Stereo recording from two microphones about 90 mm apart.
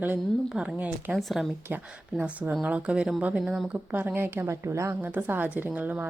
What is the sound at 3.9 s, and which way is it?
Speech, 20° right (ahead or behind).